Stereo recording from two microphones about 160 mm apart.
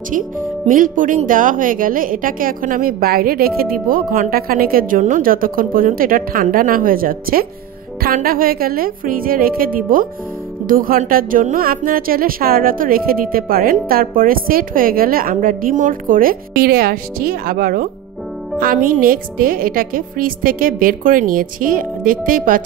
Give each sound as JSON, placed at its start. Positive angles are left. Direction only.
{"t": 0.7, "sound": "speech", "side_deg": -55}